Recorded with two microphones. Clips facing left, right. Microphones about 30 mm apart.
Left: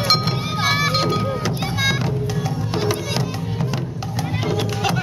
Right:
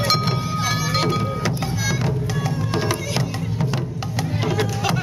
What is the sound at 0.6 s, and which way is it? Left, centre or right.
Music, left.